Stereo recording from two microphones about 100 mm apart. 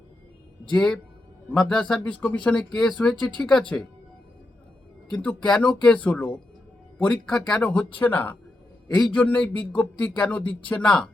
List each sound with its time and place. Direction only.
0.7 s speech: 5° left (ahead or behind)
5.1 s speech: 15° left (ahead or behind)